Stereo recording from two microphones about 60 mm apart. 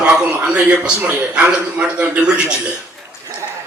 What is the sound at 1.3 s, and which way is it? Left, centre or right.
A man's voice, centre.